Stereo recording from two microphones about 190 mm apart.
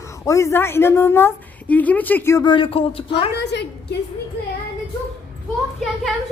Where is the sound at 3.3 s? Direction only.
60° left (ahead or behind).